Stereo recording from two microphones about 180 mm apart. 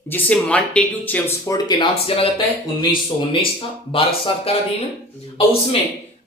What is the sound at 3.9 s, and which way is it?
Speech, 30° left (ahead or behind).